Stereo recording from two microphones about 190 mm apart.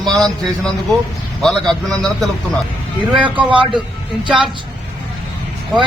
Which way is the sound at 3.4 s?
25° right (ahead or behind).